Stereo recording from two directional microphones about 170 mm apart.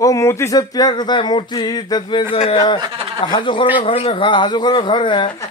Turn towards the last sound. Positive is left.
turn(degrees=30)  # may be behind; listen again after turning